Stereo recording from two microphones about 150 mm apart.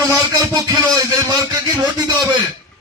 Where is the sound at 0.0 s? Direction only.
20° right (ahead or behind).